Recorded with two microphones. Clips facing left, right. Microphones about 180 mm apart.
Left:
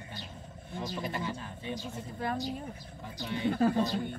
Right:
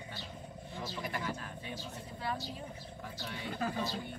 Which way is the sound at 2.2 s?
50° left (ahead or behind).